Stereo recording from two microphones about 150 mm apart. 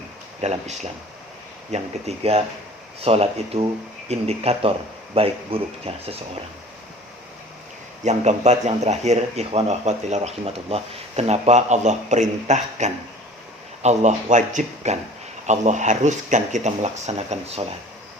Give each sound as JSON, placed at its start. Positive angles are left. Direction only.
{"t": 0.4, "sound": "speech", "side_deg": -50}
{"t": 8.0, "sound": "speech", "side_deg": -50}